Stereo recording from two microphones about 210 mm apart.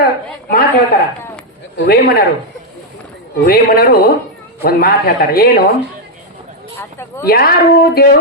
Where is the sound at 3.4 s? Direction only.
45° left (ahead or behind).